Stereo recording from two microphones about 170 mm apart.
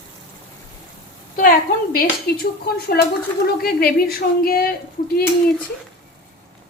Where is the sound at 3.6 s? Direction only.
65° left (ahead or behind).